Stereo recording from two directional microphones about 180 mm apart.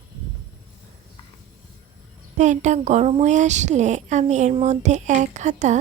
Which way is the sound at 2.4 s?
40° right (ahead or behind).